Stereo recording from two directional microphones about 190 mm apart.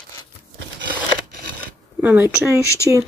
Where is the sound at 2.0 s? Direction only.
10° right (ahead or behind).